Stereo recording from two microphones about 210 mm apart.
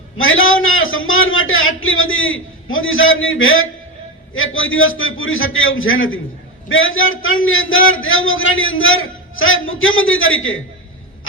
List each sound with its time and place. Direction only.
0.2 s a man's voice: 70° left (ahead or behind)